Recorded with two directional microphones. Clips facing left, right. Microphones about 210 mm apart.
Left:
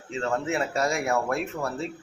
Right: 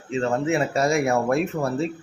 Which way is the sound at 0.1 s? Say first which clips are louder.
Right 5 dB; 20° right (ahead or behind).